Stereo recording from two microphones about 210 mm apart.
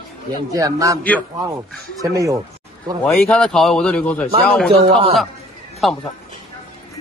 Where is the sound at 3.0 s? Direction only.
5° left (ahead or behind).